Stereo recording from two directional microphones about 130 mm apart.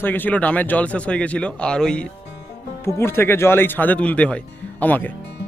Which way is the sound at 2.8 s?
20° left (ahead or behind).